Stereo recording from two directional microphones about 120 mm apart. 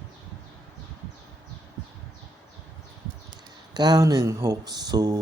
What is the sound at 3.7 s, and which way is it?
Speech, 35° right (ahead or behind).